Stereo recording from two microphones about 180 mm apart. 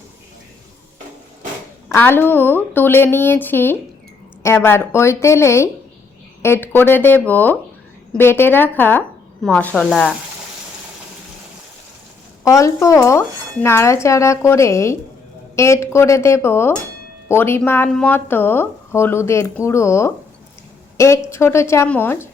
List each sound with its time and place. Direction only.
1.9 s speech: 10° left (ahead or behind)
12.5 s speech: 15° left (ahead or behind)
21.2 s speech: 15° left (ahead or behind)